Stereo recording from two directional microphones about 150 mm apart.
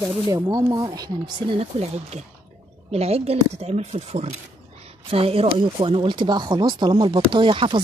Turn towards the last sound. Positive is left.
turn(degrees=-35)  # may be behind; listen again after turning